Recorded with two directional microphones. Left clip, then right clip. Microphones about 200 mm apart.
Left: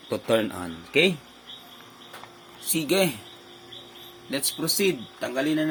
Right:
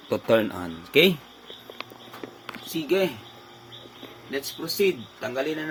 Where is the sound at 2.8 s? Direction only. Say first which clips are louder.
Even; 55° left (ahead or behind).